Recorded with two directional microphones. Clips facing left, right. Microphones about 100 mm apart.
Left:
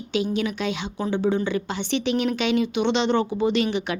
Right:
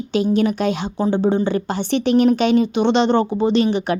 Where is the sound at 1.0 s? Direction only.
30° right (ahead or behind).